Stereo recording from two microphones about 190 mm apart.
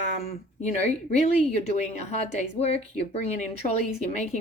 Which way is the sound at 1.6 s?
40° left (ahead or behind).